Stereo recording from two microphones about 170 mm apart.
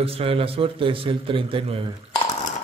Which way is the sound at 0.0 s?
35° right (ahead or behind).